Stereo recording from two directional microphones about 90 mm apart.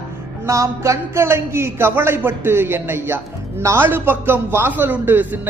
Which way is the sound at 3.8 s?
25° right (ahead or behind).